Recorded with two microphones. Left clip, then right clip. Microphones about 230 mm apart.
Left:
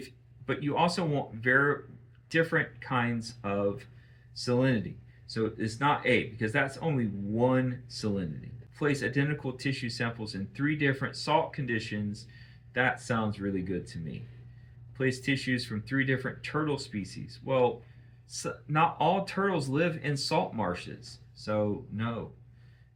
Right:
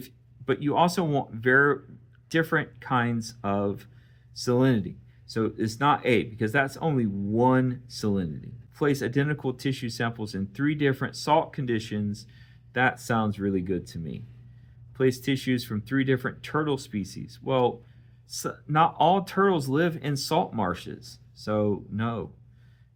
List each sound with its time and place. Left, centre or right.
0.4 s speech: right
8.8 s speech: right